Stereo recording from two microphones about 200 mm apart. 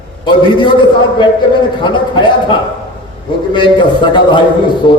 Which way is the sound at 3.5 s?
25° left (ahead or behind).